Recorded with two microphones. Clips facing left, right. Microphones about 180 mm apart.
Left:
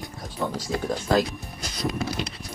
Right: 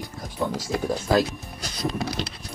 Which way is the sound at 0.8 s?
5° right (ahead or behind).